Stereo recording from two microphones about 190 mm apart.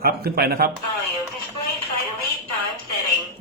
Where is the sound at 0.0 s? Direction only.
55° right (ahead or behind).